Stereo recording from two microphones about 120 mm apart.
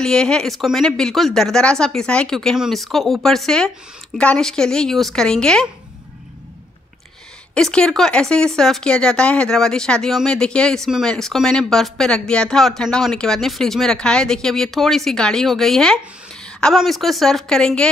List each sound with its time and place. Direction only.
0.0 s speech: 5° left (ahead or behind)
7.5 s speech: 5° left (ahead or behind)